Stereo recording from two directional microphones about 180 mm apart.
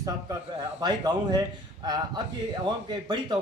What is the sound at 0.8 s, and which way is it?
A man's voice, 25° right (ahead or behind).